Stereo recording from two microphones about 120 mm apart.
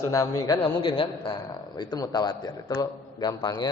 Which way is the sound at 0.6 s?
45° left (ahead or behind).